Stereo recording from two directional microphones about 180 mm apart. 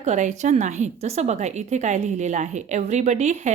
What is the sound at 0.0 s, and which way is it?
A woman's voice, 40° right (ahead or behind).